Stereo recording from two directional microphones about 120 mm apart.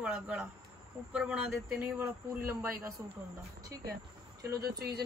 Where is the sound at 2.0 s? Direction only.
20° right (ahead or behind).